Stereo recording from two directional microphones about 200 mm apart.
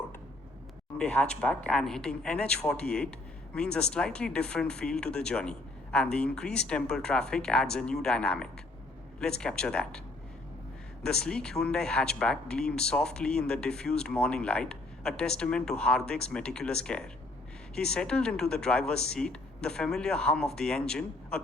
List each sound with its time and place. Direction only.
0.9 s speech: 5° left (ahead or behind)
11.0 s speech: 5° left (ahead or behind)